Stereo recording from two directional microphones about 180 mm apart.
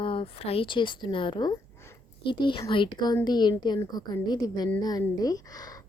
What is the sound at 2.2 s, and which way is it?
Speech, 25° left (ahead or behind).